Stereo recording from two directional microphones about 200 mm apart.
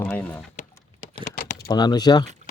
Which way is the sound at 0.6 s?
35° left (ahead or behind).